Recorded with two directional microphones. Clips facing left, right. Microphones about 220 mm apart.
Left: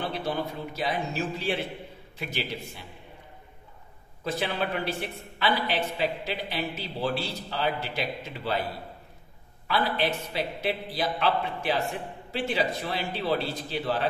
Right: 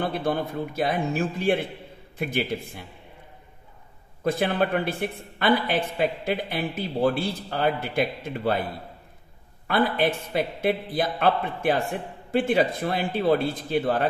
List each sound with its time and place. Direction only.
0.0 s a man's voice: 50° right (ahead or behind)
4.2 s a man's voice: 50° right (ahead or behind)
9.7 s a man's voice: 50° right (ahead or behind)